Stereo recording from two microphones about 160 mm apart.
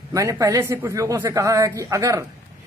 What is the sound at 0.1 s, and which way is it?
A man's voice, 20° right (ahead or behind).